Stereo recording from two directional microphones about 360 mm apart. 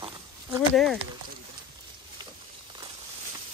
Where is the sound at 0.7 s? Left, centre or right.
Centre.